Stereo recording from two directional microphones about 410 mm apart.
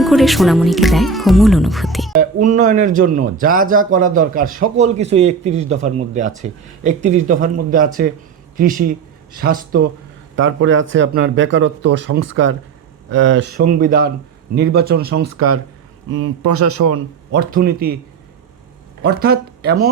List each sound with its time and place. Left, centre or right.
0.0 s speech: centre
2.1 s a man's voice: centre; by 17.0 s right
17.3 s speech: right
19.0 s speech: right